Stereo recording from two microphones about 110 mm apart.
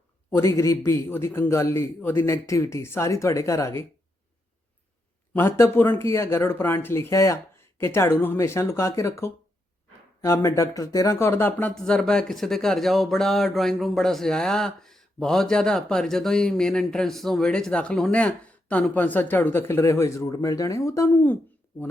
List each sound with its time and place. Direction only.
0.3 s a man's voice: 30° left (ahead or behind)
5.3 s a man's voice: 20° left (ahead or behind)
11.7 s speech: 5° left (ahead or behind); by 21.3 s 25° left (ahead or behind)